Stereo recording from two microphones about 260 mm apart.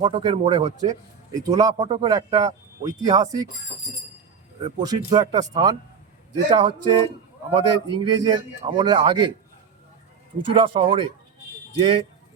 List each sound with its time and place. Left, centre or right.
0.0 s speech: centre
5.0 s speech: centre
10.3 s speech: centre